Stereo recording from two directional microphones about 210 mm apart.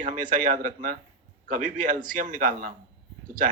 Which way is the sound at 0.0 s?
40° right (ahead or behind).